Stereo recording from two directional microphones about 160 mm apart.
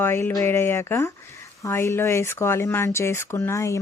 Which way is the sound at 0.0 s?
15° left (ahead or behind).